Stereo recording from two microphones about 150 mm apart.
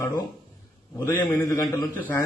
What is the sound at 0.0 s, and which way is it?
A man's voice, 25° left (ahead or behind).